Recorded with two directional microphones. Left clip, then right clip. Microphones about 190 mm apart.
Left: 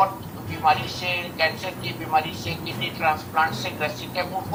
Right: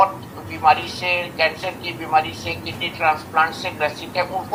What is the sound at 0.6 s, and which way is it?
Speech, 45° right (ahead or behind).